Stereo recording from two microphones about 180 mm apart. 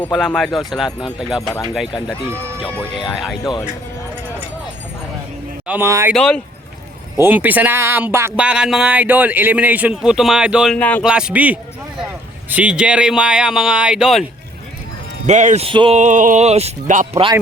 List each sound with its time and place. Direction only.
0.0 s speech: 5° left (ahead or behind)
1.4 s speech: 20° left (ahead or behind)
1.7 s speech: centre (ahead or behind)
5.6 s speech: 10° right (ahead or behind)
6.1 s speech: 5° left (ahead or behind)
7.2 s speech: 10° right (ahead or behind)
10.8 s speech: 5° left (ahead or behind)
11.0 s speech: 5° right (ahead or behind)
15.3 s speech: 40° right (ahead or behind)
16.0 s speech: 45° right (ahead or behind)